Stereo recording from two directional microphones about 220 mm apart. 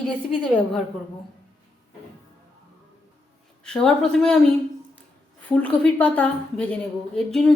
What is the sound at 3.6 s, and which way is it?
Speech, 5° left (ahead or behind).